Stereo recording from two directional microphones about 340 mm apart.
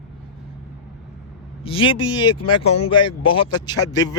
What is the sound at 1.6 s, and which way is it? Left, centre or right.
Speech, centre.